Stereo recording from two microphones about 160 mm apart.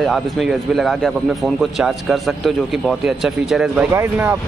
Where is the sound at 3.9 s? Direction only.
15° right (ahead or behind).